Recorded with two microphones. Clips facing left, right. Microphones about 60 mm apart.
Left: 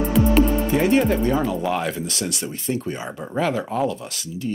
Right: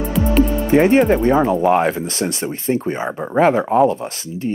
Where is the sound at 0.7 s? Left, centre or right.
Right.